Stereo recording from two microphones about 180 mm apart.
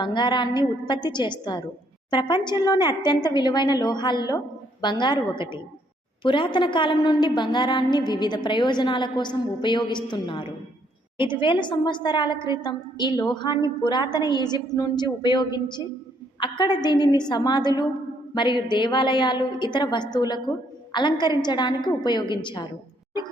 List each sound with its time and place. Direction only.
0.0 s a woman's voice: 25° left (ahead or behind)